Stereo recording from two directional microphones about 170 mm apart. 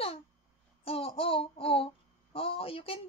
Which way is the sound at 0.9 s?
35° left (ahead or behind).